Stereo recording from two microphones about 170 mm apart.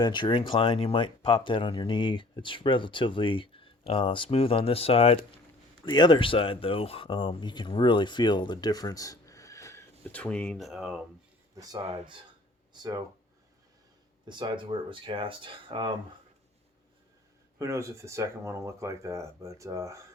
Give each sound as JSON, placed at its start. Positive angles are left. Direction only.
{"t": 0.0, "sound": "speech", "side_deg": 25}
{"t": 11.5, "sound": "speech", "side_deg": -20}
{"t": 14.3, "sound": "speech", "side_deg": -25}
{"t": 17.6, "sound": "speech", "side_deg": -15}